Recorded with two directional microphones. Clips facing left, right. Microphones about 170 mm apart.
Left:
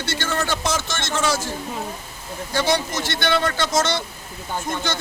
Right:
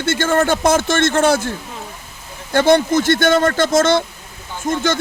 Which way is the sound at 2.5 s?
55° right (ahead or behind).